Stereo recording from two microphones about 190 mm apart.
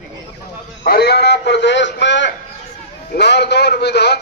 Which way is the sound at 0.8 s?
55° left (ahead or behind).